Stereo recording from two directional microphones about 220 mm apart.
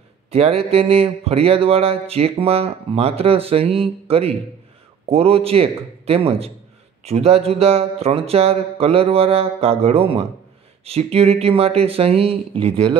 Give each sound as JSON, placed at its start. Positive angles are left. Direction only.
{"t": 0.3, "sound": "speech", "side_deg": -25}